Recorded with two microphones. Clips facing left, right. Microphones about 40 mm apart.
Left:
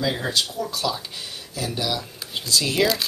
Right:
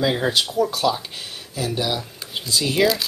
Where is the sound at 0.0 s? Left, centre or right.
Right.